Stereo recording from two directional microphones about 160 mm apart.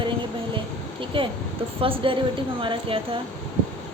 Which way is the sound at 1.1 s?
35° right (ahead or behind).